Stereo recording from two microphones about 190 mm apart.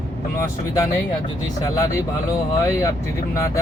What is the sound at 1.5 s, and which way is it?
Speech, 15° left (ahead or behind).